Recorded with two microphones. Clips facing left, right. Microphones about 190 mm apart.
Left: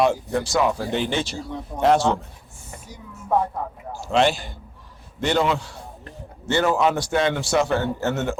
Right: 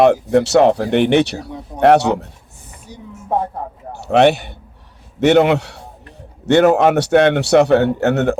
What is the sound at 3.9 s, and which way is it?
A man's voice, 65° right (ahead or behind).